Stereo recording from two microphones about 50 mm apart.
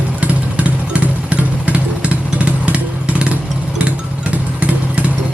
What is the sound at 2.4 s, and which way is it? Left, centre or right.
Vehicle, right.